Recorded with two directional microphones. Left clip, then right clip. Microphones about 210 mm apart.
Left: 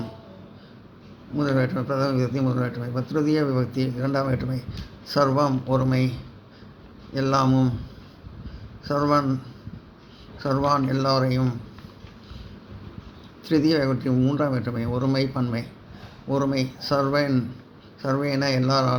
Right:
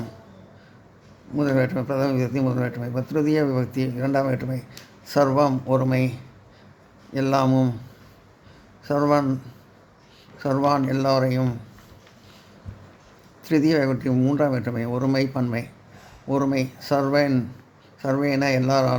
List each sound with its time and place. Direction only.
1.4 s a man's voice: 30° right (ahead or behind)
8.8 s a man's voice: 35° right (ahead or behind)
13.5 s a man's voice: 30° right (ahead or behind)